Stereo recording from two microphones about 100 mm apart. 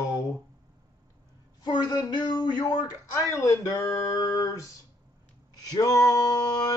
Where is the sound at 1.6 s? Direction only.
45° left (ahead or behind).